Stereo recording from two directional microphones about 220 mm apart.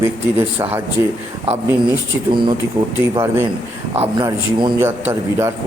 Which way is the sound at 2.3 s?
20° right (ahead or behind).